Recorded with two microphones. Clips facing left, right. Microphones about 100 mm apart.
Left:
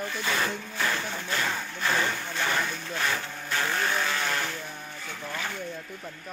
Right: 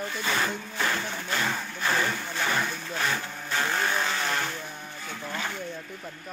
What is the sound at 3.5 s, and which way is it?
Vehicle, 15° right (ahead or behind).